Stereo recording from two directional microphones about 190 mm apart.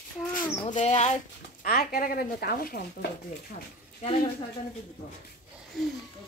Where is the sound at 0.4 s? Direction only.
20° left (ahead or behind).